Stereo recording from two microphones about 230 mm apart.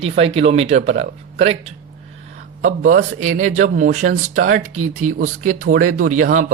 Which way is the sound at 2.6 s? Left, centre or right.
Right.